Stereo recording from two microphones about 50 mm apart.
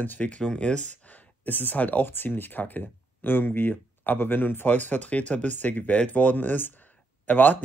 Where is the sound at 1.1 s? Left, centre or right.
Left.